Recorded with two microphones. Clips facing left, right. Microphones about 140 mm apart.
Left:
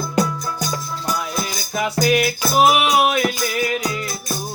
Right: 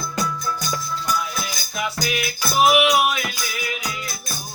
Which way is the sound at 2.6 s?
40° left (ahead or behind).